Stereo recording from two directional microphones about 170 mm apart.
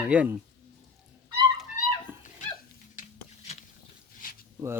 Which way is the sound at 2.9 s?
40° left (ahead or behind).